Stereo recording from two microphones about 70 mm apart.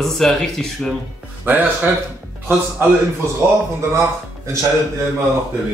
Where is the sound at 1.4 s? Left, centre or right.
Right.